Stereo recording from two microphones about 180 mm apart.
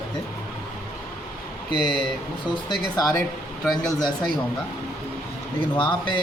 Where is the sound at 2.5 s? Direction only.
25° left (ahead or behind).